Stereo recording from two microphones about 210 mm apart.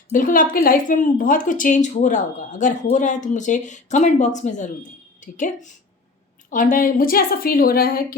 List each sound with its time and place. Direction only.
0.1 s a woman's voice: 40° left (ahead or behind)